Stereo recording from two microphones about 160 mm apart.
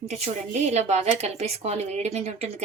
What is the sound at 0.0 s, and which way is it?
A woman's voice, 45° right (ahead or behind).